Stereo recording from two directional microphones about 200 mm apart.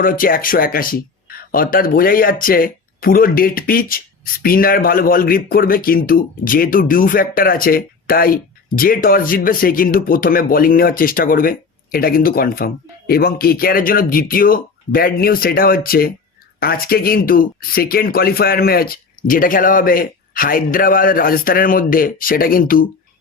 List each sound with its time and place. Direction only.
0.0 s speech: 45° left (ahead or behind)